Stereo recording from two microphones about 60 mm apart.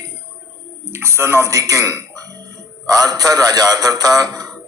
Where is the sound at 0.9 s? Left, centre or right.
Right.